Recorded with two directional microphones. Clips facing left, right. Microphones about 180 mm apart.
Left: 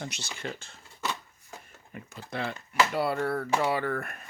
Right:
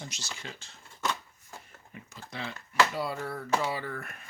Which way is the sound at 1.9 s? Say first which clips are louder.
Left 6 dB; 55° left (ahead or behind).